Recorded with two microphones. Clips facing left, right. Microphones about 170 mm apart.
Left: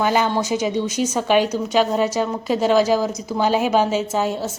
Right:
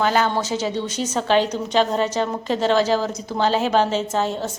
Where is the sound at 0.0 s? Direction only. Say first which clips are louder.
Left 1 dB; 15° left (ahead or behind).